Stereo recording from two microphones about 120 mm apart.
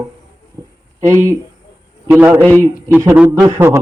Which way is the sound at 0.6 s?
30° right (ahead or behind).